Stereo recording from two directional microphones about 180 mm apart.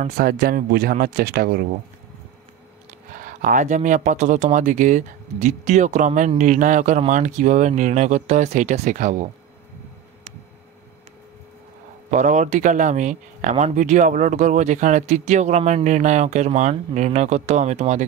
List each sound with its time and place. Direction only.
0.0 s speech: 55° right (ahead or behind)
3.2 s speech: 45° right (ahead or behind)
12.1 s speech: 40° right (ahead or behind)